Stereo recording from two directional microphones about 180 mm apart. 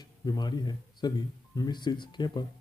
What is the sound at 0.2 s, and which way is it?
Speech, 25° left (ahead or behind).